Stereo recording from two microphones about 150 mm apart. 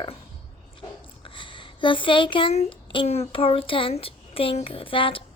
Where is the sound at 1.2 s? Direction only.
35° left (ahead or behind).